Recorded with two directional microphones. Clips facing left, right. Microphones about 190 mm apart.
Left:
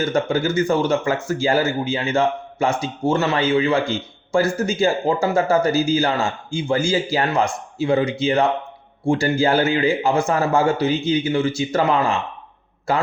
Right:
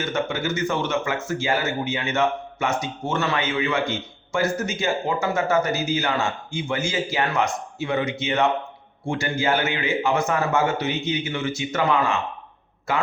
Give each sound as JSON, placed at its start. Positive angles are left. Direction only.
{"t": 0.0, "sound": "speech", "side_deg": 35}